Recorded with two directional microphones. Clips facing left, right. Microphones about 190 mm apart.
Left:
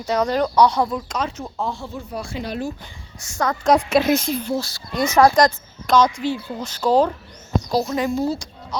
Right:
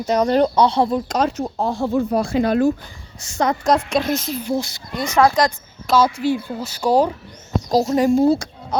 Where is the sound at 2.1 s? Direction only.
45° right (ahead or behind).